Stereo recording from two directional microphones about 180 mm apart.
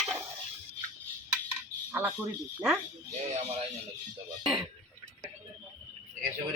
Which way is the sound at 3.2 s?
35° right (ahead or behind).